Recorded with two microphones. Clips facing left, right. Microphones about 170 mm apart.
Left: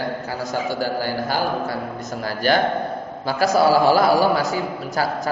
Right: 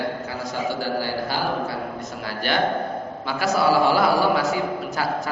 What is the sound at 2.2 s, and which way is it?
Speech, 40° left (ahead or behind).